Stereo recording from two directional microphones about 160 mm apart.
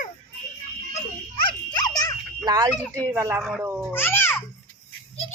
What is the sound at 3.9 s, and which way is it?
Speech, 15° left (ahead or behind).